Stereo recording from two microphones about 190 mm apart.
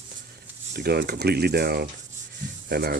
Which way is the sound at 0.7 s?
55° right (ahead or behind).